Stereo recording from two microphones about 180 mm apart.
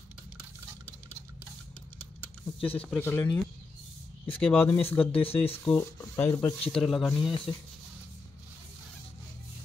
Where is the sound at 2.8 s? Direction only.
10° left (ahead or behind).